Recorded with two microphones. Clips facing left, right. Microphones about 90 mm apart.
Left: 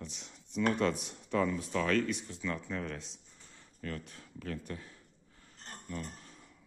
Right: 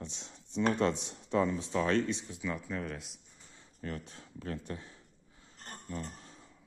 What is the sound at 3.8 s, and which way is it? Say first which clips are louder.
Speech: right 1 dB; 25° right (ahead or behind).